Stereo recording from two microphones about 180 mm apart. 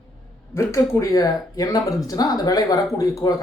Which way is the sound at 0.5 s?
15° left (ahead or behind).